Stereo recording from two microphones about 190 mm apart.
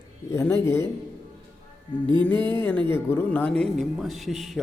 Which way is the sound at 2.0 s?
25° right (ahead or behind).